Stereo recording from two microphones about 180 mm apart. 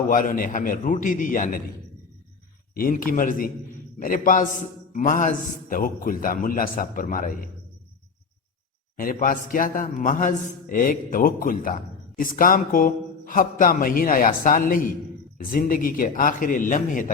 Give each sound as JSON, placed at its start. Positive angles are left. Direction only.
{"t": 0.1, "sound": "a man's voice", "side_deg": 50}
{"t": 2.7, "sound": "a man's voice", "side_deg": 50}
{"t": 9.0, "sound": "a man's voice", "side_deg": 50}